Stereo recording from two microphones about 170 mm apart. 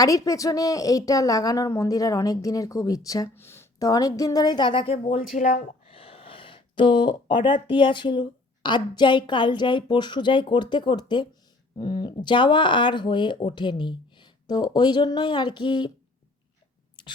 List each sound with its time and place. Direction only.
0.0 s a woman's voice: 20° left (ahead or behind)
5.4 s speech: 50° left (ahead or behind)
5.9 s a woman's voice: 35° left (ahead or behind)
17.0 s whispering: 25° left (ahead or behind)